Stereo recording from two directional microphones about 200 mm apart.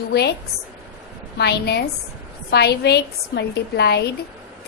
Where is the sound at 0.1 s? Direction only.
55° left (ahead or behind).